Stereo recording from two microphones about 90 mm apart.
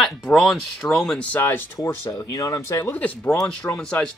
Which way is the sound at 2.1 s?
40° left (ahead or behind).